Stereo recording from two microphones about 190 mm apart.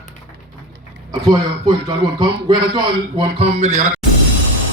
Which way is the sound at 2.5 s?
25° right (ahead or behind).